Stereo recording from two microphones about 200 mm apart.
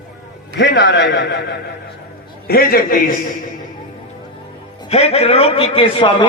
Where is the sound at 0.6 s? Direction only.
60° left (ahead or behind).